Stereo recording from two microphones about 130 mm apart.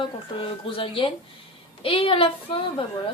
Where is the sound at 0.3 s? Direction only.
40° left (ahead or behind).